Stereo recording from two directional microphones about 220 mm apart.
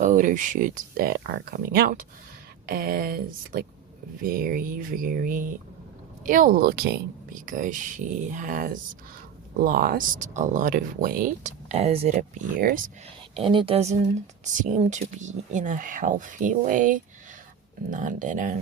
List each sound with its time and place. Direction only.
0.0 s speech: 35° right (ahead or behind)
13.3 s speech: 25° right (ahead or behind)